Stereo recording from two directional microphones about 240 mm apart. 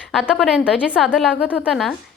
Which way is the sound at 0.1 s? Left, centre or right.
Centre.